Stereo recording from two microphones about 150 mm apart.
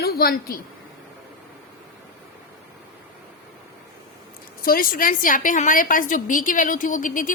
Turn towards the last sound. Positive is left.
turn(degrees=60)  # may be behind; listen again after turning